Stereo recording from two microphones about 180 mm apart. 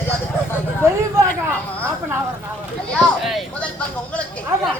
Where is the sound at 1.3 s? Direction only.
10° left (ahead or behind).